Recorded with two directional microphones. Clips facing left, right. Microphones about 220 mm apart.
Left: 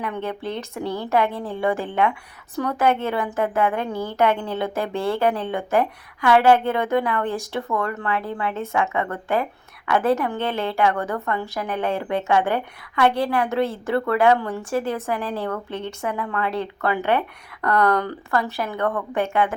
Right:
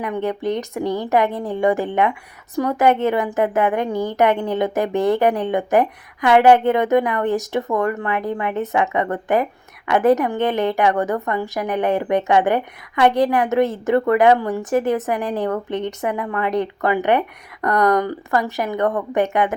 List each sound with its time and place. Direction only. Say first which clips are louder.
0.0 s a woman's voice: right 5 dB; 15° right (ahead or behind)